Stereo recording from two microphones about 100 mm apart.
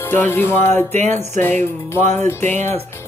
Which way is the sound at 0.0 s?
20° left (ahead or behind).